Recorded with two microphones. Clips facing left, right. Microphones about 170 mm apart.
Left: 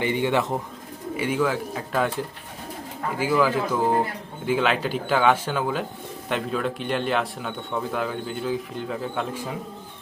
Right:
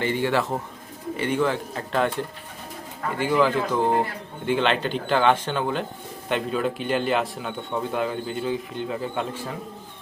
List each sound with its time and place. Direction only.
0.0 s speech: 15° left (ahead or behind)
1.1 s speech: 5° left (ahead or behind)
3.4 s speech: 5° left (ahead or behind)